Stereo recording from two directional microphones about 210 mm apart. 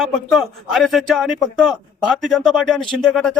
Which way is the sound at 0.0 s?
Centre (ahead or behind).